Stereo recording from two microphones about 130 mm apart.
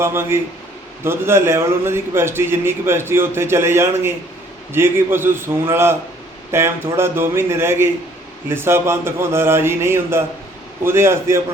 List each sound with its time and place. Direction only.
0.0 s a man's voice: 20° right (ahead or behind)